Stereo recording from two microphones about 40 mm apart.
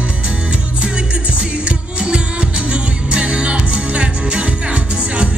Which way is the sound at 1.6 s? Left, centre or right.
Right.